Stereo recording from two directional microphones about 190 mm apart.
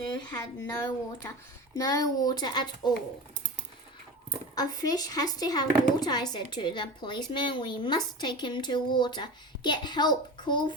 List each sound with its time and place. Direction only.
0.1 s speech: 20° left (ahead or behind)
4.5 s speech: 20° left (ahead or behind)